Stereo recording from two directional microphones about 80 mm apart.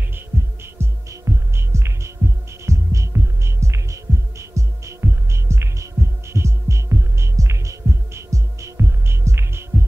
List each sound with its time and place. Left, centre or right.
0.1 s music: right
2.6 s hum: right